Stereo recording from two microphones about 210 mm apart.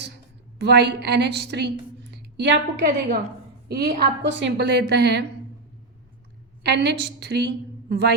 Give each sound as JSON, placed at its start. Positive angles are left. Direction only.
{"t": 0.6, "sound": "a woman's voice", "side_deg": -50}
{"t": 6.6, "sound": "a woman's voice", "side_deg": -55}